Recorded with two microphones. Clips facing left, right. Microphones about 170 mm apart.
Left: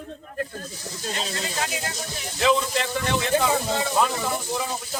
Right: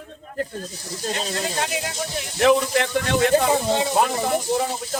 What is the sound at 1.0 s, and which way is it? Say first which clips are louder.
Speech: right 4 dB; 50° right (ahead or behind).